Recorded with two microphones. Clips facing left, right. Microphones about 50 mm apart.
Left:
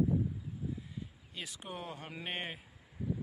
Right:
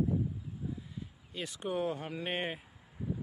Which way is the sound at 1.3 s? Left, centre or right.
Centre.